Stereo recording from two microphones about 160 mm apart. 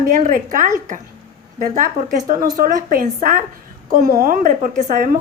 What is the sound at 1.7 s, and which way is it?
A woman's voice, 55° right (ahead or behind).